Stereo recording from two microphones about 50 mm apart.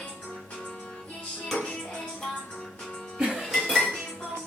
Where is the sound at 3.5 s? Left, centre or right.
Centre.